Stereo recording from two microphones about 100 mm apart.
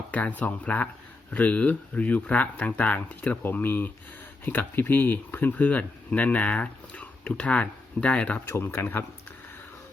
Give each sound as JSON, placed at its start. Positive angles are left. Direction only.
{"t": 0.1, "sound": "speech", "side_deg": 15}
{"t": 8.4, "sound": "speech", "side_deg": 25}